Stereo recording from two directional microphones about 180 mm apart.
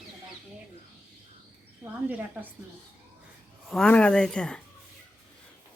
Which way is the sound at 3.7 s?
5° left (ahead or behind).